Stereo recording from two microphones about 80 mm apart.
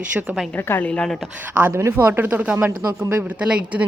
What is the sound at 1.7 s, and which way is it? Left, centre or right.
A woman's voice, right.